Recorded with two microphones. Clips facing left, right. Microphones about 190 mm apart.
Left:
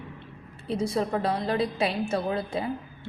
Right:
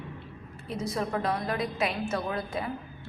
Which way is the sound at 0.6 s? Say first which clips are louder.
Left 5 dB; 30° left (ahead or behind).